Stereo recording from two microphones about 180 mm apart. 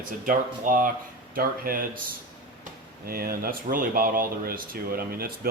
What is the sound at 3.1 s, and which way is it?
Speech, 55° right (ahead or behind).